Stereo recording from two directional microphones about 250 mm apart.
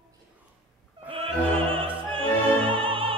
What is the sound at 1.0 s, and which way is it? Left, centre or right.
Opera, right.